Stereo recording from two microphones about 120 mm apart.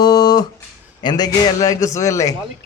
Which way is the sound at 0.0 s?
35° left (ahead or behind).